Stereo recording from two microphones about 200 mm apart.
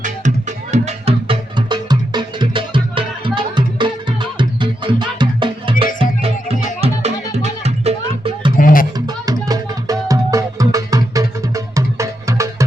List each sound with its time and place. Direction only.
0.0 s music: 35° right (ahead or behind)
8.5 s music: 45° left (ahead or behind)
9.0 s music: 20° right (ahead or behind)